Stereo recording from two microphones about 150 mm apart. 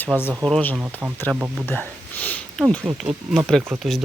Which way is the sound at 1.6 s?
10° left (ahead or behind).